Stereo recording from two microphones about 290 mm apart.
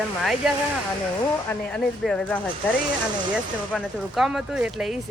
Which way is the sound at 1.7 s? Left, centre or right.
Centre.